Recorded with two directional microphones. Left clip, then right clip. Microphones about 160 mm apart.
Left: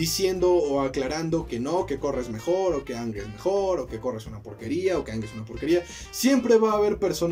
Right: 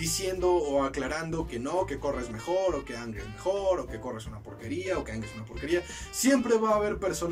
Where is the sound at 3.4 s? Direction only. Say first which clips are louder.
Left 3 dB; 25° left (ahead or behind).